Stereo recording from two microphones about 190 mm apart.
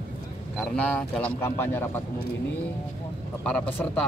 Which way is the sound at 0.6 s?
5° left (ahead or behind).